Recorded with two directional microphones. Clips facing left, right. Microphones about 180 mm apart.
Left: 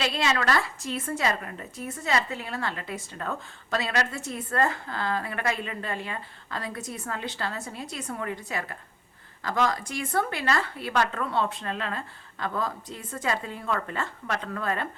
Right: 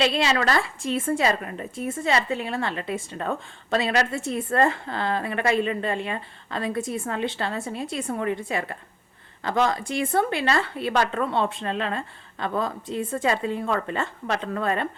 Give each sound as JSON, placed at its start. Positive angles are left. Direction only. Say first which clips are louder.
{"t": 0.0, "sound": "a woman's voice", "louder": "right 4 dB", "side_deg": -25}